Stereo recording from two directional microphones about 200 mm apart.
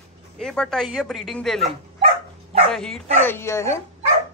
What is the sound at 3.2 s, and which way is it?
Speech, 10° left (ahead or behind).